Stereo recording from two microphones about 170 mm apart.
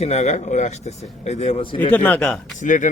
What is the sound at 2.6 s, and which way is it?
Speech, 50° left (ahead or behind).